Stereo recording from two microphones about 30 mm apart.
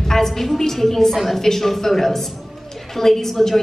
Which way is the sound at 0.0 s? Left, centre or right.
Centre.